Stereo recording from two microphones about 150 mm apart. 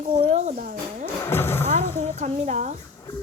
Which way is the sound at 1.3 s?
15° left (ahead or behind).